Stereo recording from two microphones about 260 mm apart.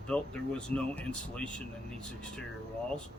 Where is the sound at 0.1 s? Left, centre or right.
Centre.